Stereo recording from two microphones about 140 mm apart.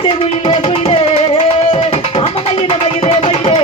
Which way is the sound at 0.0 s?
40° left (ahead or behind).